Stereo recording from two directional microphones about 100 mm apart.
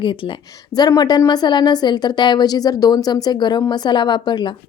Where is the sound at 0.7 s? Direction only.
40° left (ahead or behind).